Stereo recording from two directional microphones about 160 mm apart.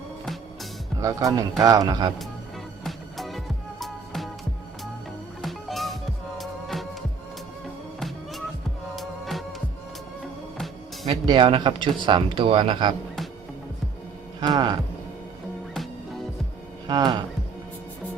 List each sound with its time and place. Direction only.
0.9 s speech: 20° right (ahead or behind)
2.8 s music: centre (ahead or behind)
5.4 s music: centre (ahead or behind)
7.9 s music: centre (ahead or behind)
11.1 s speech: 30° right (ahead or behind)
14.4 s speech: 25° right (ahead or behind)
16.8 s speech: 25° right (ahead or behind)